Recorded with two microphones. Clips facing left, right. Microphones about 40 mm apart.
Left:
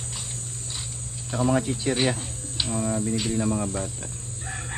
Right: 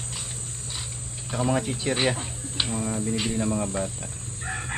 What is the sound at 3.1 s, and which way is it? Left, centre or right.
Speech, centre.